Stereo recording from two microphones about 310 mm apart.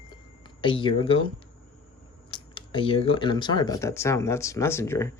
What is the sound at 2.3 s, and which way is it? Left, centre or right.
Speech, centre.